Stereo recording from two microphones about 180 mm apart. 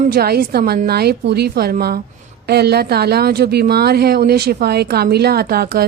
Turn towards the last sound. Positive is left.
turn(degrees=-60)  # may be behind; listen again after turning